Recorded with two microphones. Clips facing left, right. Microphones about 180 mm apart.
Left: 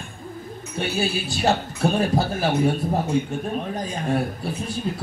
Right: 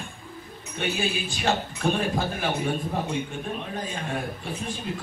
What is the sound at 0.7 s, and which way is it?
Speech, 35° left (ahead or behind).